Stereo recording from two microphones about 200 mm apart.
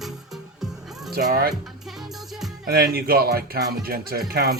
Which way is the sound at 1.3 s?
55° right (ahead or behind).